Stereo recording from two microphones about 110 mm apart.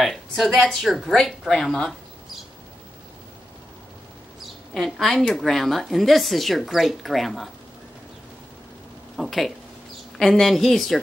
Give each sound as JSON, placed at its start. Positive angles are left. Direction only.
{"t": 0.0, "sound": "a woman's voice", "side_deg": 0}
{"t": 4.7, "sound": "a woman's voice", "side_deg": 5}
{"t": 9.1, "sound": "a woman's voice", "side_deg": 0}